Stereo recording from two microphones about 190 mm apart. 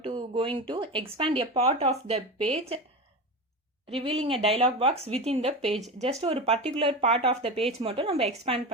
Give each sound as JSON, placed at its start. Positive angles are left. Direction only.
{"t": 0.0, "sound": "a sound", "side_deg": -30}
{"t": 0.7, "sound": "speech", "side_deg": -25}
{"t": 3.9, "sound": "a woman's voice", "side_deg": -30}